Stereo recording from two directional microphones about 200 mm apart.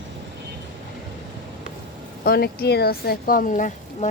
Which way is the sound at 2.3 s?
50° left (ahead or behind).